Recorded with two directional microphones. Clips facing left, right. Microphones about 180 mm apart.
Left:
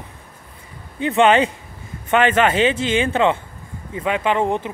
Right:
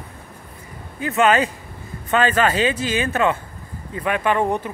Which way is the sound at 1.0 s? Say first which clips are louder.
Left 3 dB; 25° left (ahead or behind).